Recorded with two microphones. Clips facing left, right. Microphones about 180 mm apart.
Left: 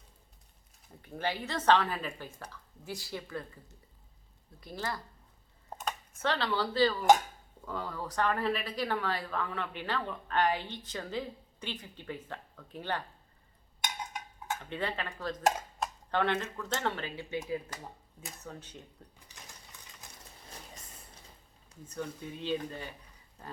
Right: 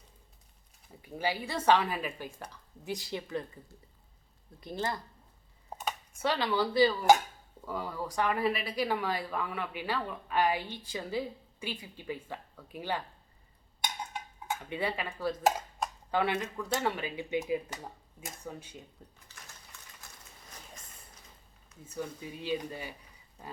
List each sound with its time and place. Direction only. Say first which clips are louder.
1.0 s speech: right 1 dB; 10° right (ahead or behind)
4.6 s speech: right 3 dB; 20° right (ahead or behind)
5.8 s speech: right 1 dB; 10° right (ahead or behind)
14.6 s speech: right 2 dB; 10° right (ahead or behind)
21.8 s speech: even; 10° right (ahead or behind)